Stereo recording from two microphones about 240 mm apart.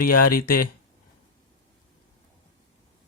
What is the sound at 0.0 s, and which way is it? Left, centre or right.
Speech, left.